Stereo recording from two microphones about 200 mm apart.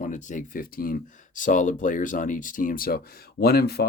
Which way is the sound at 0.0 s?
40° left (ahead or behind).